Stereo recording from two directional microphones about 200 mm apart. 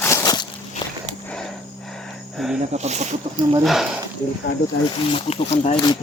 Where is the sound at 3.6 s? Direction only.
Centre (ahead or behind).